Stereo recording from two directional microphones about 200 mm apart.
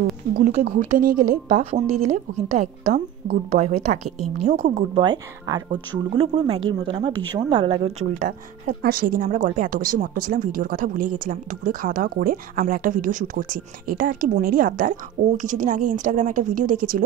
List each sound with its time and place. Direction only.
0.4 s a woman's voice: 35° right (ahead or behind)
1.6 s a woman's voice: 30° right (ahead or behind)